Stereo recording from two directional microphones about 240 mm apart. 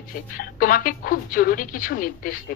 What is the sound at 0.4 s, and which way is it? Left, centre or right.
A woman's voice, left.